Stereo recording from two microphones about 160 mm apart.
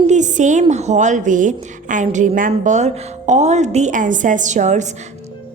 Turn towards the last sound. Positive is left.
turn(degrees=-50)  # may be behind; listen again after turning